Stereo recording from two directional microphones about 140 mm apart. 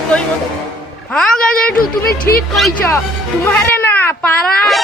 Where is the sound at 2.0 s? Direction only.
90° left.